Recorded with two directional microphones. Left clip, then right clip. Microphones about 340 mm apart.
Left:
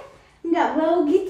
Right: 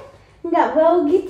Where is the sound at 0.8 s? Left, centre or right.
Centre.